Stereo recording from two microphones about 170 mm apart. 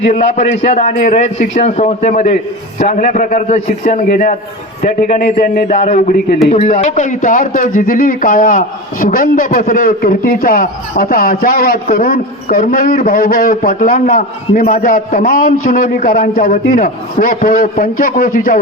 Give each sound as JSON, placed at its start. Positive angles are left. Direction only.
{"t": 0.0, "sound": "a man's voice", "side_deg": 40}